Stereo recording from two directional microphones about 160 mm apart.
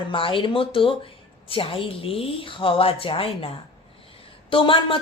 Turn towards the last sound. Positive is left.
turn(degrees=35)  # may be behind; listen again after turning